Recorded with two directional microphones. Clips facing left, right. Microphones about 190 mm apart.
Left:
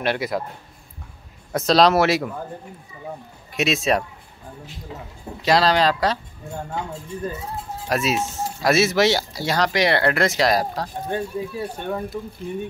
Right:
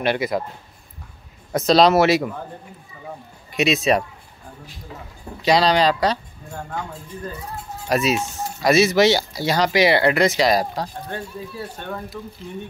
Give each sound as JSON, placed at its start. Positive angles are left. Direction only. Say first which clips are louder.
{"t": 0.0, "sound": "speech", "louder": "right 2 dB", "side_deg": 0}
{"t": 1.5, "sound": "speech", "louder": "right 1 dB", "side_deg": 0}
{"t": 3.5, "sound": "speech", "louder": "right 2 dB", "side_deg": 0}
{"t": 5.4, "sound": "speech", "louder": "right 1 dB", "side_deg": 0}
{"t": 6.5, "sound": "speech", "louder": "left 1 dB", "side_deg": 25}
{"t": 7.9, "sound": "speech", "louder": "right 2 dB", "side_deg": 0}
{"t": 11.1, "sound": "speech", "louder": "left 5 dB", "side_deg": 15}